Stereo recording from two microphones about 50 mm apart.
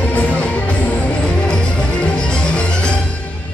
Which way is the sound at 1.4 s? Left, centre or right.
Centre.